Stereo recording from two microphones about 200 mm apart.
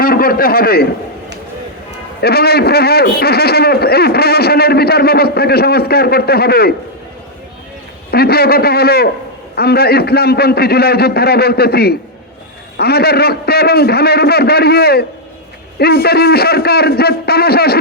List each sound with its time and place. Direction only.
0.0 s a man's voice: 45° left (ahead or behind)
2.2 s a man's voice: 50° left (ahead or behind)
8.1 s a man's voice: 50° left (ahead or behind)